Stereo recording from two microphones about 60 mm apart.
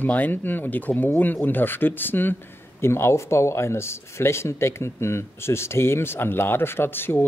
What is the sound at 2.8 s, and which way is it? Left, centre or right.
Speech, left.